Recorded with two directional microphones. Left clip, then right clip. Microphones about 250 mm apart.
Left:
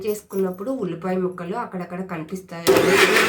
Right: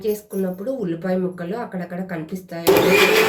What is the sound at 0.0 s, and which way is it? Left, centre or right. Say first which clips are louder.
Speech: right 1 dB; centre.